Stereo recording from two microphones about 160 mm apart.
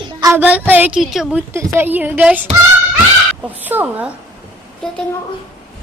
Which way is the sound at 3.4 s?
10° right (ahead or behind).